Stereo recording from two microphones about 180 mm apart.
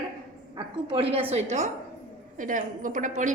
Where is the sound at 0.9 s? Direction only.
30° right (ahead or behind).